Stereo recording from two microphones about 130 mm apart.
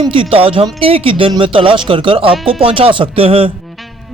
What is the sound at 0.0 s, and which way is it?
Speech, 45° right (ahead or behind).